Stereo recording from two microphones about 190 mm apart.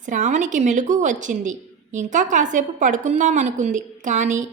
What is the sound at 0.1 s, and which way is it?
A woman's voice, 40° right (ahead or behind).